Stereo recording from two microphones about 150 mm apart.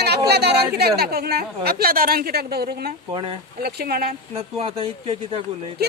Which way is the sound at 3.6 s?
90° right.